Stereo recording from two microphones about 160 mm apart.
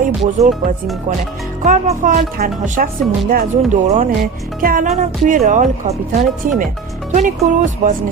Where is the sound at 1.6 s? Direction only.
55° right (ahead or behind).